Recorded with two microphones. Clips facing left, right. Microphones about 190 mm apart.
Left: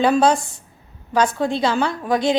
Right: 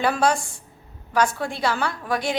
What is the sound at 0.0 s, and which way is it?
A woman's voice, 20° left (ahead or behind).